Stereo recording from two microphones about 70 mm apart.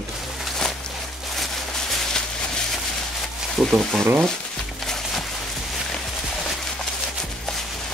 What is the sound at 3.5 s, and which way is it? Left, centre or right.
Speech, centre.